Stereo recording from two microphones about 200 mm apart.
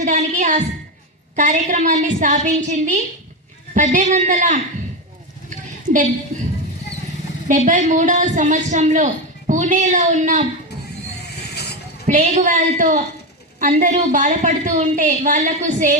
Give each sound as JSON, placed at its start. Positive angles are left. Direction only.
{"t": 0.0, "sound": "a man's voice", "side_deg": -35}
{"t": 5.5, "sound": "a sound", "side_deg": -40}
{"t": 7.4, "sound": "a man's voice", "side_deg": -40}
{"t": 11.2, "sound": "vehicle", "side_deg": 55}
{"t": 12.0, "sound": "a man's voice", "side_deg": -35}